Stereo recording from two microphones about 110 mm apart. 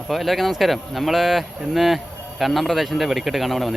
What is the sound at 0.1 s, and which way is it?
Speech, centre (ahead or behind).